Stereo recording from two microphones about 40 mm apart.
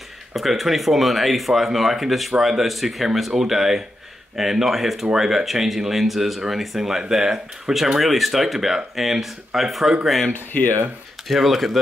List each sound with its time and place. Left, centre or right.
0.3 s speech: centre
8.0 s speech: centre
10.3 s speech: left
11.2 s speech: centre